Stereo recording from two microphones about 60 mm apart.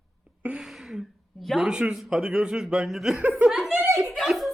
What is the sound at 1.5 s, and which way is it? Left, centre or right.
Speech, centre.